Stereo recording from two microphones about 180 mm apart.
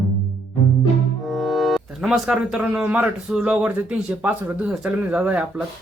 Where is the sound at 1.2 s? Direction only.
Centre (ahead or behind).